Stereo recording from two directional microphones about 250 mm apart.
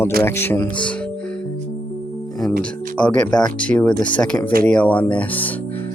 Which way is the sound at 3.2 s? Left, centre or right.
Centre.